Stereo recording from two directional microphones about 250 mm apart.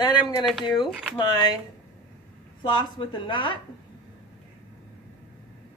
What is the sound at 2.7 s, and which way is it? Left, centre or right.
Speech, centre.